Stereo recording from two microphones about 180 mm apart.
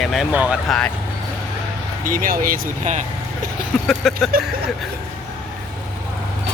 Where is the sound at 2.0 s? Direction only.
50° right (ahead or behind).